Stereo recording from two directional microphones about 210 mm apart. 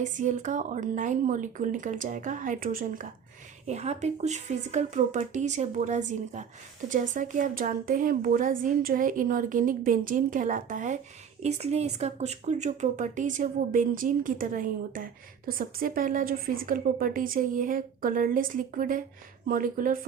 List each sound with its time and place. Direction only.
0.0 s speech: 35° right (ahead or behind)